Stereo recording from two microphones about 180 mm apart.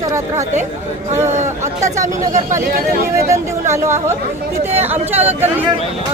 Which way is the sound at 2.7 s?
55° right (ahead or behind).